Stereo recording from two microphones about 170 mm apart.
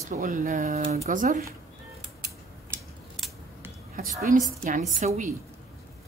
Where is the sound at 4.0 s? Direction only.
55° right (ahead or behind).